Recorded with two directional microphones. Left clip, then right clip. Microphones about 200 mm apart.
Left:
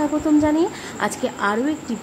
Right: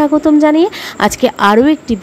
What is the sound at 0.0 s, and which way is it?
A woman's voice, 40° right (ahead or behind).